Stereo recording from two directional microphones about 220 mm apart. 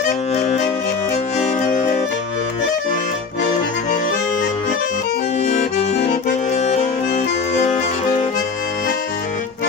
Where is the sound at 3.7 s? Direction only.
35° left (ahead or behind).